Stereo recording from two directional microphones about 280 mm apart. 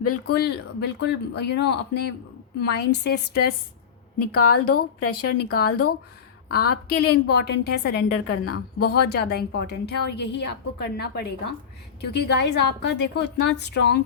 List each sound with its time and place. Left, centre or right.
0.0 s speech: left
0.3 s speech: left
4.2 s speech: left
6.8 s speech: left
8.3 s speech: left
9.0 s speech: left
12.4 s speech: left